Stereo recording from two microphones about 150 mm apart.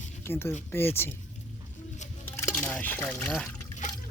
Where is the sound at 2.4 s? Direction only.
10° left (ahead or behind).